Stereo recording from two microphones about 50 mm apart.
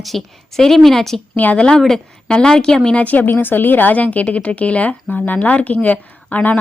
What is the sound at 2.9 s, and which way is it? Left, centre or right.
A woman's voice, left.